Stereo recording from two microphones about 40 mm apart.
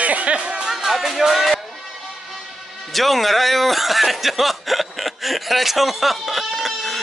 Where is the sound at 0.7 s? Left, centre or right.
Centre.